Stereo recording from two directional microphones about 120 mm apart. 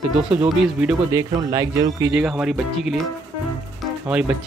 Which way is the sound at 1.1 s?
30° right (ahead or behind).